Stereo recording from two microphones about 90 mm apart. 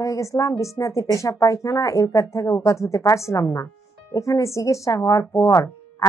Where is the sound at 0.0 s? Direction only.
35° left (ahead or behind).